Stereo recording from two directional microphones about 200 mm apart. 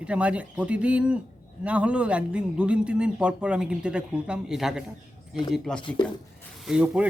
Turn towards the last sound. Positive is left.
turn(degrees=-5)  # may be behind; listen again after turning